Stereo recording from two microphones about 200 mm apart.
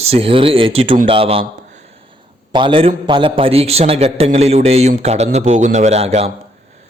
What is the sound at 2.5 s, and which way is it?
A man's voice, 25° right (ahead or behind).